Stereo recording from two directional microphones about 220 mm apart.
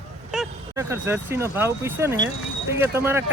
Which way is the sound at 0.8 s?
10° right (ahead or behind).